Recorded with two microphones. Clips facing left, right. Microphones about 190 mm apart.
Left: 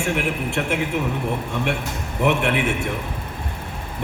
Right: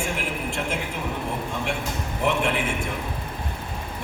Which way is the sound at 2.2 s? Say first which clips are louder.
Left 4 dB; 65° left (ahead or behind).